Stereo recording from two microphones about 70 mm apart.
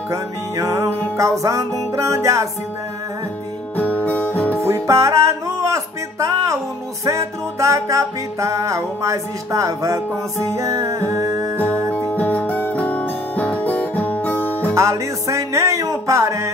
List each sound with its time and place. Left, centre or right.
0.1 s music: right
3.7 s music: left
4.6 s music: right
11.9 s music: left
14.7 s music: right